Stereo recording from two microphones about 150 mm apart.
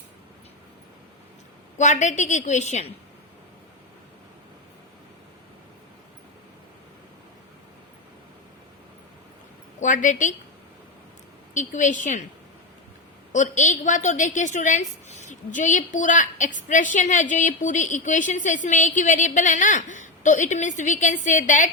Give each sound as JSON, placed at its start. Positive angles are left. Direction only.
{"t": 1.8, "sound": "a woman's voice", "side_deg": 55}
{"t": 9.8, "sound": "a woman's voice", "side_deg": 60}
{"t": 11.5, "sound": "a woman's voice", "side_deg": 55}
{"t": 13.3, "sound": "a woman's voice", "side_deg": 55}